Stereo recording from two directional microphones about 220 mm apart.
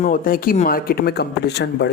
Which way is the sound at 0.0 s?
40° left (ahead or behind).